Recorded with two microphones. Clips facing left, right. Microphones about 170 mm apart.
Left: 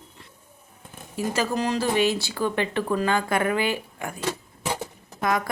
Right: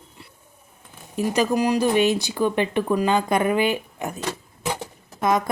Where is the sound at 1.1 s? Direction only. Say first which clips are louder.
Right 4 dB; 15° right (ahead or behind).